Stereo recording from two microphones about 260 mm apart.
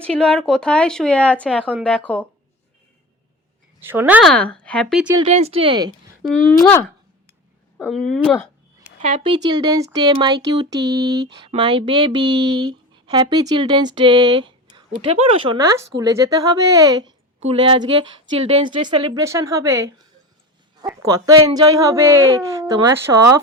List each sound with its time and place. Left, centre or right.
0.0 s speech: centre
3.8 s speech: centre
5.1 s speech: right
6.2 s speech: centre
9.0 s speech: right